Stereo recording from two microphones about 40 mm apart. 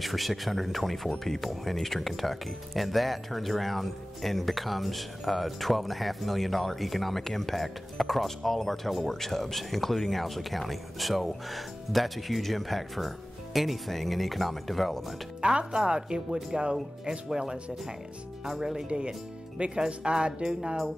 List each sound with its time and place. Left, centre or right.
0.0 s speech: centre
15.4 s speech: centre
18.6 s speech: centre